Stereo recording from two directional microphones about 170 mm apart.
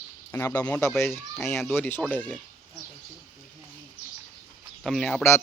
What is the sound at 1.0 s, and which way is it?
Speech, centre (ahead or behind).